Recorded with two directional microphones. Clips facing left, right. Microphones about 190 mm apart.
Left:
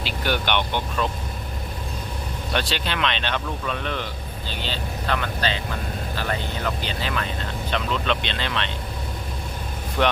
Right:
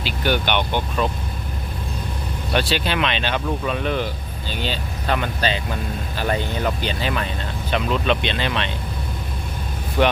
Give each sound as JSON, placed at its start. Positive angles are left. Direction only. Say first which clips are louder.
{"t": 0.0, "sound": "speech", "louder": "right 3 dB", "side_deg": 0}
{"t": 2.5, "sound": "speech", "louder": "right 5 dB", "side_deg": -5}
{"t": 6.8, "sound": "speech", "louder": "right 4 dB", "side_deg": -15}
{"t": 10.0, "sound": "speech", "louder": "right 3 dB", "side_deg": -5}